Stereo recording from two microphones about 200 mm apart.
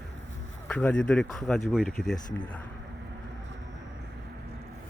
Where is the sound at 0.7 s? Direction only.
5° left (ahead or behind).